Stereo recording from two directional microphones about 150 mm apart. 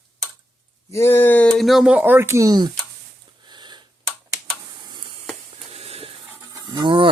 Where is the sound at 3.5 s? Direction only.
30° right (ahead or behind).